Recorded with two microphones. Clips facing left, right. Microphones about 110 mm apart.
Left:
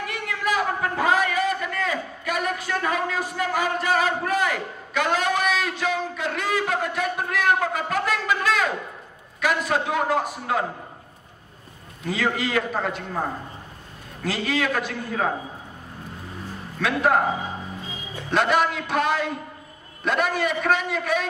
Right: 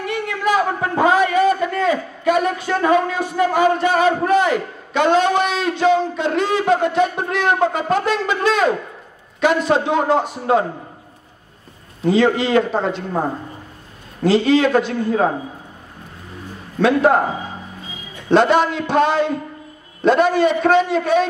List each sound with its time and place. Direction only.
0.5 s a sound: 25° right (ahead or behind)
9.4 s a man's voice: 25° right (ahead or behind)
12.0 s a man's voice: 25° right (ahead or behind)
14.2 s a man's voice: 25° right (ahead or behind)
16.8 s a man's voice: 30° right (ahead or behind)
18.3 s a man's voice: 30° right (ahead or behind)